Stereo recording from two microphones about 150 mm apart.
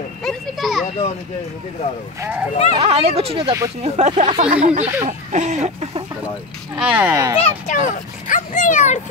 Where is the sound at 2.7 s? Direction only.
40° right (ahead or behind).